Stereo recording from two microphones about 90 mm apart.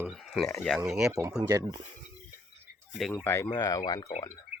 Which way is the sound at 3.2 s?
25° left (ahead or behind).